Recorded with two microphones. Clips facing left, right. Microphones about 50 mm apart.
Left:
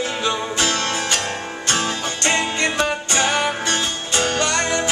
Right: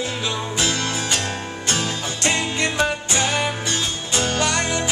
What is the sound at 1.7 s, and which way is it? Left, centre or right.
Music, left.